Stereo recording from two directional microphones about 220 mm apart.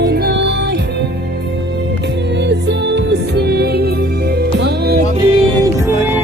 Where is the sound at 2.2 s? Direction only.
50° right (ahead or behind).